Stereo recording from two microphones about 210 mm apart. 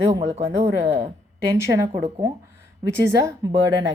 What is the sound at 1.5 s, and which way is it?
Speech, 15° right (ahead or behind).